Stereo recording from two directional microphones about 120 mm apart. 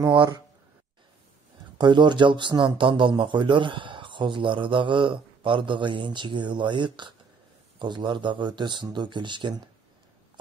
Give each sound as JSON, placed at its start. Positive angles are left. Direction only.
{"t": 0.1, "sound": "speech", "side_deg": -40}
{"t": 1.8, "sound": "speech", "side_deg": -40}